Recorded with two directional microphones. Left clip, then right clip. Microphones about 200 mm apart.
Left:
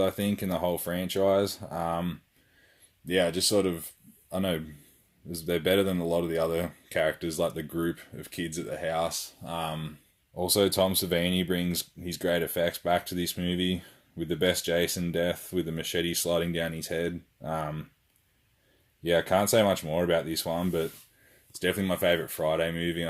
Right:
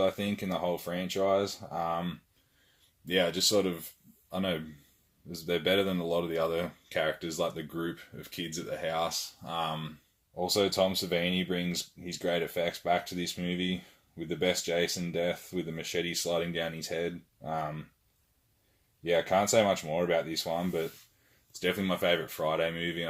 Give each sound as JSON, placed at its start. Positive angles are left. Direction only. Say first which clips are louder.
{"t": 0.0, "sound": "speech", "louder": "left 1 dB", "side_deg": 40}
{"t": 3.1, "sound": "speech", "louder": "left 2 dB", "side_deg": 30}
{"t": 10.3, "sound": "speech", "louder": "left 3 dB", "side_deg": 45}
{"t": 19.0, "sound": "speech", "louder": "left 2 dB", "side_deg": 45}